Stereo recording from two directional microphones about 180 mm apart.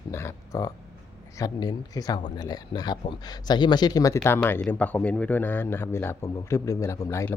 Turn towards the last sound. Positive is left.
turn(degrees=15)  # may be behind; listen again after turning